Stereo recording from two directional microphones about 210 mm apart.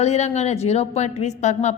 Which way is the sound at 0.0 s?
30° left (ahead or behind).